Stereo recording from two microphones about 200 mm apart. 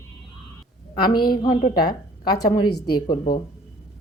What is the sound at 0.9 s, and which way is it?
A woman's voice, 20° left (ahead or behind).